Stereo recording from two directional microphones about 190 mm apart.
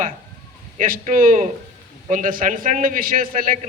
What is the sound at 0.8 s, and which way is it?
A man's voice, 40° right (ahead or behind).